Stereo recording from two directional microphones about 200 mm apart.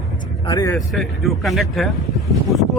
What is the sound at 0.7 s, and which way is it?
Speech, centre (ahead or behind).